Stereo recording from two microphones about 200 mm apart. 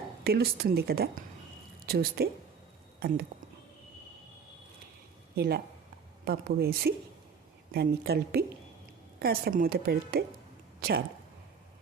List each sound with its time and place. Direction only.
0.3 s a woman's voice: 50° right (ahead or behind)
5.4 s a woman's voice: 50° right (ahead or behind)
10.8 s a sound: 50° right (ahead or behind)